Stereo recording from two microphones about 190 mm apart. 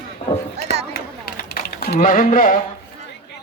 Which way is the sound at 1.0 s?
50° left (ahead or behind).